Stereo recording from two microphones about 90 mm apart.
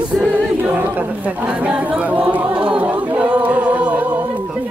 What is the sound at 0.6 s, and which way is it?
Chatter, 20° right (ahead or behind).